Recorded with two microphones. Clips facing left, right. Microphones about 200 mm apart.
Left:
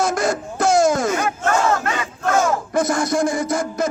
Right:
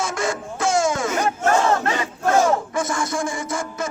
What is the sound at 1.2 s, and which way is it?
Crowd, 30° right (ahead or behind).